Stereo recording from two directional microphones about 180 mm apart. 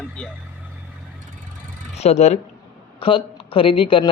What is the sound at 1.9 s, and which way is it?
A woman's voice, 35° left (ahead or behind).